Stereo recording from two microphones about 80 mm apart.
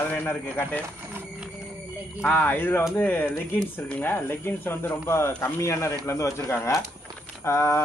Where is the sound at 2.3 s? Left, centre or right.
Left.